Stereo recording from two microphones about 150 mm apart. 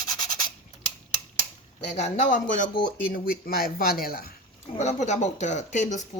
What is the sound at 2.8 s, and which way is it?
Speech, 75° left (ahead or behind).